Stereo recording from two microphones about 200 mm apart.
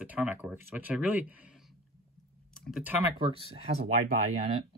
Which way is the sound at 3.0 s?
25° right (ahead or behind).